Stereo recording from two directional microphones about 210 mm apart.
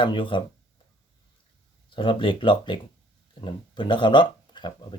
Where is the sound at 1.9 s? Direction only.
25° left (ahead or behind).